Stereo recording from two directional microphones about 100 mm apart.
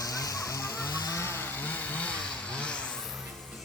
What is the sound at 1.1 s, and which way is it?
Vehicle, 25° left (ahead or behind).